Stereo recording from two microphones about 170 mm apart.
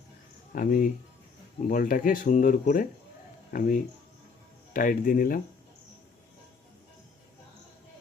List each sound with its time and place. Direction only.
0.5 s speech: 55° left (ahead or behind)